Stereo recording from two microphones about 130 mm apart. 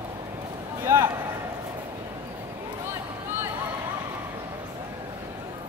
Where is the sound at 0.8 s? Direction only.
20° right (ahead or behind).